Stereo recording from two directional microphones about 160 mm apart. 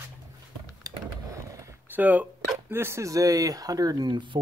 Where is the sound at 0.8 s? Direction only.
20° right (ahead or behind).